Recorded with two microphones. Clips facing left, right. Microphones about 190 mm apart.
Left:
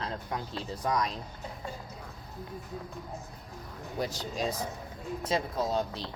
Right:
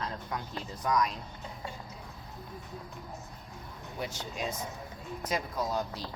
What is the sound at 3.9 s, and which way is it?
Speech, 35° left (ahead or behind).